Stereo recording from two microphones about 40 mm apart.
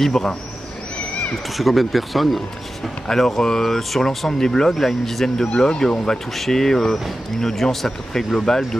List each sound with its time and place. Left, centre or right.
0.0 s speech: centre
0.9 s a sound: left
1.6 s speech: centre
3.1 s speech: centre
5.7 s speech: centre
6.3 s speech: centre